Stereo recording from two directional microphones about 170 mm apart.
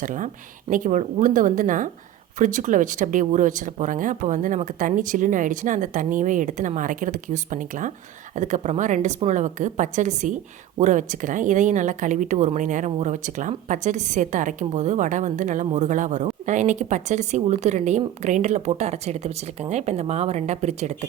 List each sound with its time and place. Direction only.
0.0 s speech: 50° right (ahead or behind)